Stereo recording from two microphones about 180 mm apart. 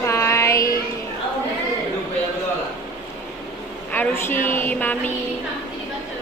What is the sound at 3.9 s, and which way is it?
A woman's voice, 10° left (ahead or behind).